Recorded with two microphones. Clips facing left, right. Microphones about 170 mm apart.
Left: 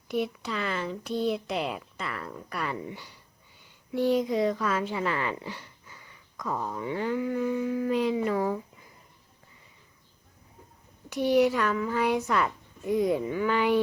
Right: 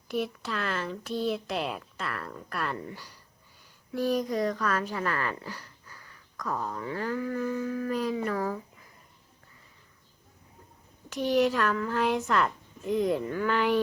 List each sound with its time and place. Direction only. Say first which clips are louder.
0.1 s a woman's voice: left 1 dB; 15° left (ahead or behind)
1.6 s a woman's voice: left 1 dB; centre (ahead or behind)
3.9 s speech: left 3 dB; 25° left (ahead or behind)
4.5 s a woman's voice: left 1 dB; 10° left (ahead or behind)
6.6 s a woman's voice: left 4 dB; 10° left (ahead or behind)
11.1 s a woman's voice: left 2 dB; 15° left (ahead or behind)